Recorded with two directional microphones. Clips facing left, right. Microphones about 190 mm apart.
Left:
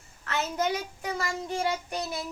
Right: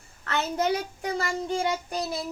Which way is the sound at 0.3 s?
35° right (ahead or behind).